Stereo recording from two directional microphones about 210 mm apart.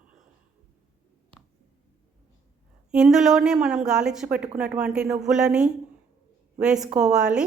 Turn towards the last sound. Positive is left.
turn(degrees=-5)  # may be behind; listen again after turning